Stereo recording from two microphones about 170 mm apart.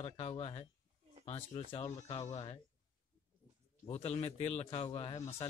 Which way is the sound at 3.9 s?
40° left (ahead or behind).